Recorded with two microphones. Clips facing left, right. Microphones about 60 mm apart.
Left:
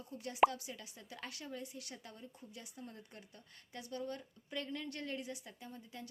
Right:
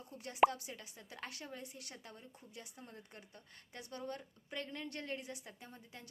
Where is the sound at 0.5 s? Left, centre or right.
Right.